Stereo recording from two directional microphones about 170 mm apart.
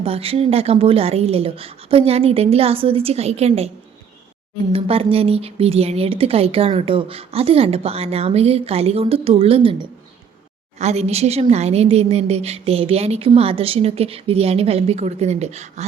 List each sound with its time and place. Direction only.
0.0 s a woman's voice: 35° right (ahead or behind)
4.7 s a woman's voice: 35° right (ahead or behind)
10.8 s a woman's voice: 40° right (ahead or behind)